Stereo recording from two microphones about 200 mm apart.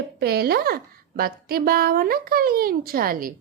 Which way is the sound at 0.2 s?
50° right (ahead or behind).